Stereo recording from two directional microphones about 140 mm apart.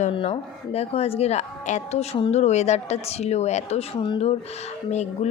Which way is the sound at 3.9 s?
35° left (ahead or behind).